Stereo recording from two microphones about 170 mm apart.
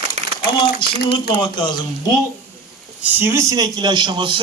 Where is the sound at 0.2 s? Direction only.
40° right (ahead or behind).